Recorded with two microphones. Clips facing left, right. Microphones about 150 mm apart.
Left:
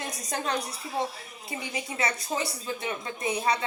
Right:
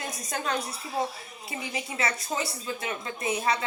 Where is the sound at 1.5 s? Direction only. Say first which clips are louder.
Even; 30° left (ahead or behind).